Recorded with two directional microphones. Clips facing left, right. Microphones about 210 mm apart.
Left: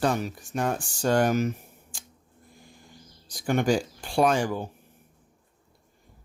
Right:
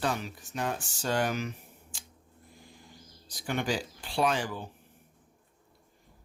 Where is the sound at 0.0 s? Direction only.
45° left (ahead or behind).